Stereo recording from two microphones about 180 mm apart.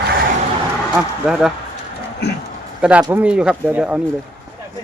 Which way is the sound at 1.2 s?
5° right (ahead or behind).